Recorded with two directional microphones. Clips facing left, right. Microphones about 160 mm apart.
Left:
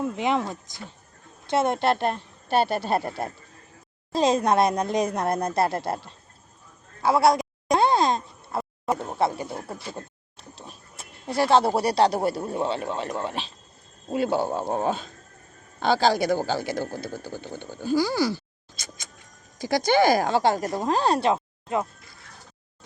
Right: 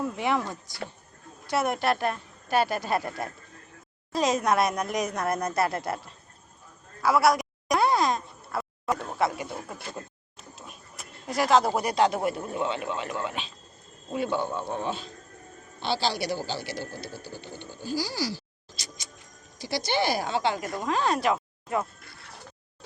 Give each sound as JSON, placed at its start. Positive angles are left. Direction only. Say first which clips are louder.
{"t": 0.0, "sound": "speech", "louder": "left 3 dB", "side_deg": 20}
{"t": 7.0, "sound": "a sound", "louder": "left 2 dB", "side_deg": 25}
{"t": 9.9, "sound": "speech", "louder": "left 2 dB", "side_deg": 30}
{"t": 19.7, "sound": "speech", "louder": "left 7 dB", "side_deg": 45}